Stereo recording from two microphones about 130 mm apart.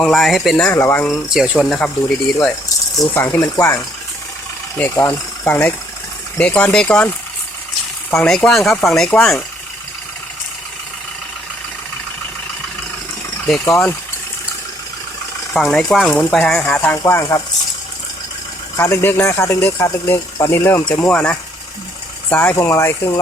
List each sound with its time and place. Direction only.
0.0 s speech: centre (ahead or behind)
0.7 s speech: 20° left (ahead or behind)
1.3 s speech: centre (ahead or behind)
8.1 s speech: 10° left (ahead or behind)
13.5 s speech: 10° left (ahead or behind)
15.5 s speech: centre (ahead or behind)
17.0 s speech: 25° left (ahead or behind)
18.8 s speech: 20° left (ahead or behind)
21.1 s speech: 10° left (ahead or behind)